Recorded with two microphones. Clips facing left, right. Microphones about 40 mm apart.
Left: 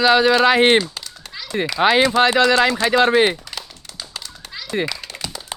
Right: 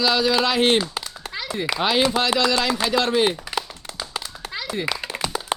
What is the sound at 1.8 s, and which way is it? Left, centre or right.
Speech, left.